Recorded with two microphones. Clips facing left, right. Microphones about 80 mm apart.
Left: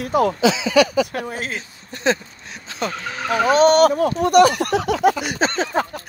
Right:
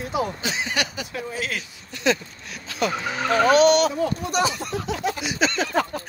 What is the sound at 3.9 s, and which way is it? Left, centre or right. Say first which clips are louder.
Speech: left 9 dB; left.